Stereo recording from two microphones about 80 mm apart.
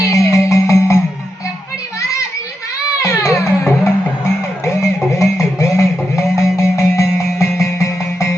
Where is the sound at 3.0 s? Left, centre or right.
Left.